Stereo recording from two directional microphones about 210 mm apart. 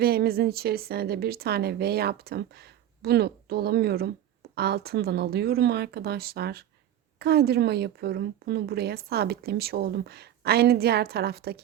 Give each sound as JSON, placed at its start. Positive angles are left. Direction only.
{"t": 0.0, "sound": "a woman's voice", "side_deg": -50}